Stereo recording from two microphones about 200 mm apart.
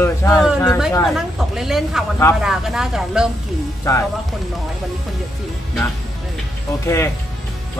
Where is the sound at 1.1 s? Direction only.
Centre (ahead or behind).